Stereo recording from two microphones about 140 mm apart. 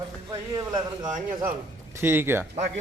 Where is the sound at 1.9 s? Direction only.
15° right (ahead or behind).